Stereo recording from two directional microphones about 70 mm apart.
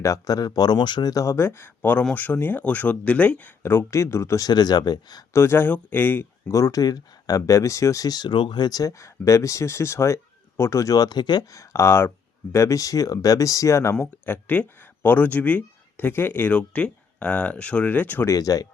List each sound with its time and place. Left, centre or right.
0.0 s speech: left
1.2 s speech: left
3.6 s speech: left
4.4 s speech: left
5.3 s speech: left
6.5 s speech: left
8.9 s speech: left
11.5 s speech: left
14.0 s speech: left
18.3 s speech: left